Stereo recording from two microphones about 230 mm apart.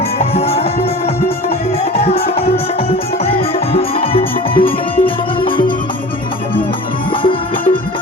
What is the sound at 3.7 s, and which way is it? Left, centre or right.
Music, left.